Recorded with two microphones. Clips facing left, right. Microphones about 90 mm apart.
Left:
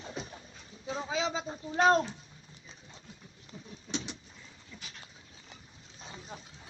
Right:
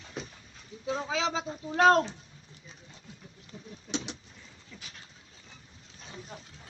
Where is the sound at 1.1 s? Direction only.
90° right.